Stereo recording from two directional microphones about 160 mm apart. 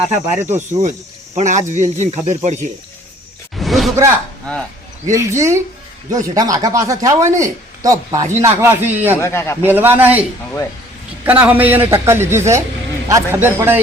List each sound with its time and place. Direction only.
0.1 s speech: 45° right (ahead or behind)
3.5 s a sound: centre (ahead or behind)
5.0 s a man's voice: 20° right (ahead or behind)
9.2 s a man's voice: 15° left (ahead or behind)
9.6 s a man's voice: 10° right (ahead or behind)
11.3 s a man's voice: 10° right (ahead or behind)